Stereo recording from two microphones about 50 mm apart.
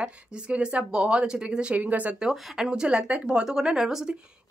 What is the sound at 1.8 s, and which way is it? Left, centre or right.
Speech, right.